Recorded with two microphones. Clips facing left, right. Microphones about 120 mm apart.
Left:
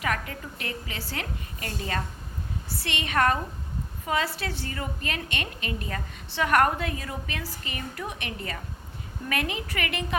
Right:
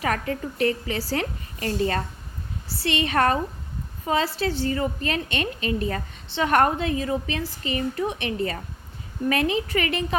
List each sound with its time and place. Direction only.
0.0 s a woman's voice: 35° right (ahead or behind)